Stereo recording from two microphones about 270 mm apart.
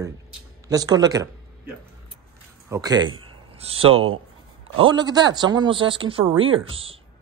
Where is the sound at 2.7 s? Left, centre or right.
Centre.